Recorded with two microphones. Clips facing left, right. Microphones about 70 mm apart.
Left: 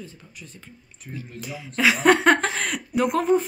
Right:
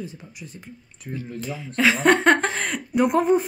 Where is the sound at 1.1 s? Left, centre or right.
Right.